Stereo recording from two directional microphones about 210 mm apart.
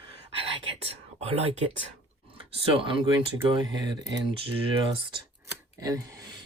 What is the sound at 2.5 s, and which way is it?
Speech, 25° right (ahead or behind).